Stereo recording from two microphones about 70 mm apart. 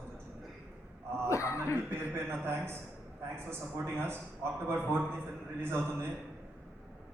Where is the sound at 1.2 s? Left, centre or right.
Left.